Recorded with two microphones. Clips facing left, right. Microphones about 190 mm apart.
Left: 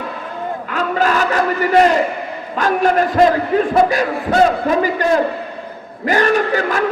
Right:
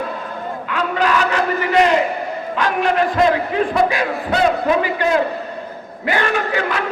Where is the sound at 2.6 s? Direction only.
45° left (ahead or behind).